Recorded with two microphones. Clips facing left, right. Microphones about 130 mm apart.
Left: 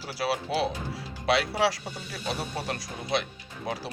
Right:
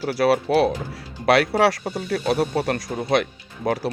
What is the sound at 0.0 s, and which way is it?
Speech, 55° right (ahead or behind).